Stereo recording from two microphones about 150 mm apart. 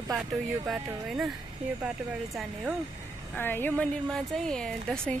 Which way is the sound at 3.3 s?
15° left (ahead or behind).